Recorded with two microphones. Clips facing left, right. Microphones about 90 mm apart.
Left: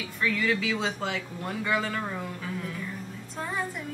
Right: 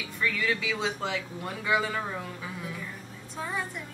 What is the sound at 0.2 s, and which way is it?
A woman's voice, centre (ahead or behind).